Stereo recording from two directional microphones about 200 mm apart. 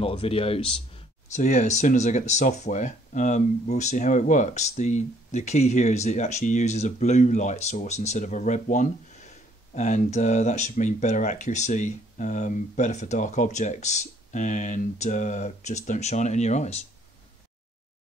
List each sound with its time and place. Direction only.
0.0 s speech: 30° left (ahead or behind)